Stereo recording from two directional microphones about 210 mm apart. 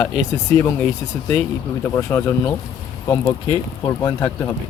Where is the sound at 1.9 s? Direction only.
10° left (ahead or behind).